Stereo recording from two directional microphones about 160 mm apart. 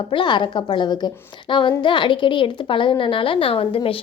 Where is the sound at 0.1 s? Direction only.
30° left (ahead or behind).